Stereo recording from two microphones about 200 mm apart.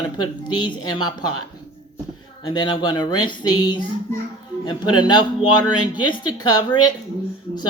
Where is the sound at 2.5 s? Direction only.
20° left (ahead or behind).